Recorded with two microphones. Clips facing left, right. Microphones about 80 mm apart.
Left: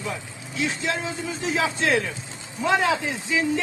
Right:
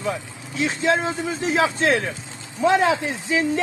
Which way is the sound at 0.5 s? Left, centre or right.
Right.